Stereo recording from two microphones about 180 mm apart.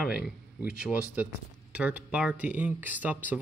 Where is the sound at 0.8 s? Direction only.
5° right (ahead or behind).